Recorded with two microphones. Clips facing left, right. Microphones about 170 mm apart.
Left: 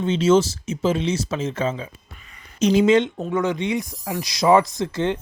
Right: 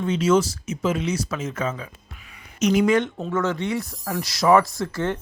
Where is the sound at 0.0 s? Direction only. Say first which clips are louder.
Left 2 dB; 25° left (ahead or behind).